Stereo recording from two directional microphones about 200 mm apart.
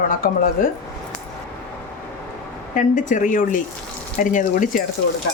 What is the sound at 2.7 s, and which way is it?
Speech, 40° left (ahead or behind).